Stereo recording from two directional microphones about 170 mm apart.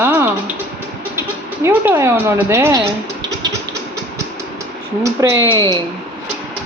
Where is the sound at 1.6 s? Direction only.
15° right (ahead or behind).